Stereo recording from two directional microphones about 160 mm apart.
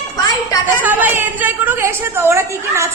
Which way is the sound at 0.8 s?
10° right (ahead or behind).